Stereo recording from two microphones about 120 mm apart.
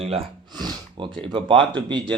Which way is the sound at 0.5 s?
40° right (ahead or behind).